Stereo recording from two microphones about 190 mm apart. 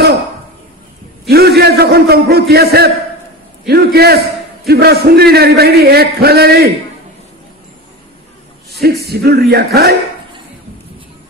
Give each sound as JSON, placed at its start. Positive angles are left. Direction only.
{"t": 1.3, "sound": "a man's voice", "side_deg": -55}
{"t": 8.8, "sound": "a man's voice", "side_deg": -60}